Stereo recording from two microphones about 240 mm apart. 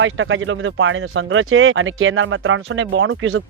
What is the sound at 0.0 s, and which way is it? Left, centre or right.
Speech, right.